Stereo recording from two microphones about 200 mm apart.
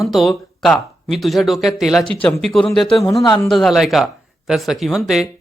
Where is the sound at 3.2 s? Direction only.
20° left (ahead or behind).